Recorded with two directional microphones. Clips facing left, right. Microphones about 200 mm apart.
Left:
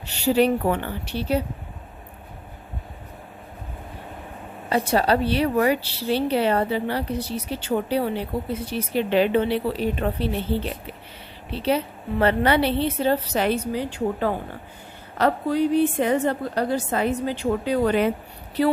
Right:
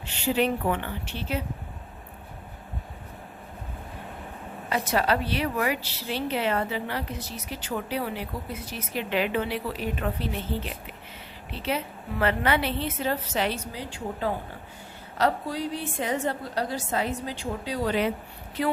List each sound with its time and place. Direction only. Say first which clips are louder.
0.0 s a woman's voice: left 6 dB; 40° left (ahead or behind)
4.7 s a woman's voice: left 5 dB; 30° left (ahead or behind)
13.4 s a woman's voice: left 7 dB; 55° left (ahead or behind)
18.6 s a woman's voice: left 6 dB; 35° left (ahead or behind)